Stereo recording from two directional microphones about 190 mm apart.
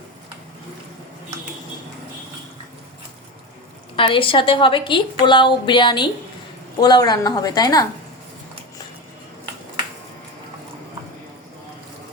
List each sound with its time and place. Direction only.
3.9 s a woman's voice: 25° left (ahead or behind)